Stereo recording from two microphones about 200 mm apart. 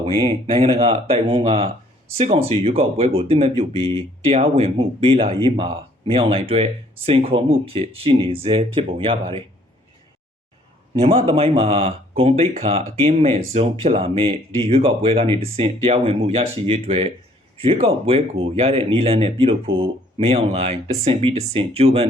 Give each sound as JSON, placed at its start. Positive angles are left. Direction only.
{"t": 0.0, "sound": "speech", "side_deg": -30}
{"t": 11.0, "sound": "speech", "side_deg": -30}